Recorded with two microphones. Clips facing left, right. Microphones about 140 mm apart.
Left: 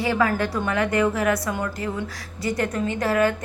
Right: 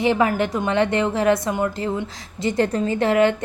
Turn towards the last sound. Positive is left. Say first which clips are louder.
# right 4 dB
turn(degrees=-25)  # may be behind; listen again after turning